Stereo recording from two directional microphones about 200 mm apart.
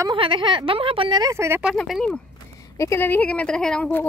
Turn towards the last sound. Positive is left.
turn(degrees=5)  # may be behind; listen again after turning